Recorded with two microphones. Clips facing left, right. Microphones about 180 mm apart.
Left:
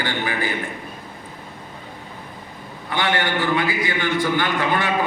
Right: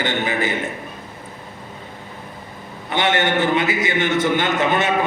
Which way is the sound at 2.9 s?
20° right (ahead or behind).